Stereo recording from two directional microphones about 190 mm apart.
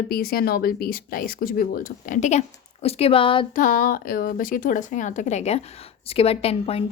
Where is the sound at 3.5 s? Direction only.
45° left (ahead or behind).